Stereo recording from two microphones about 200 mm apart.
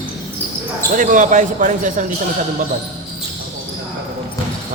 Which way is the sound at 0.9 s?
40° right (ahead or behind).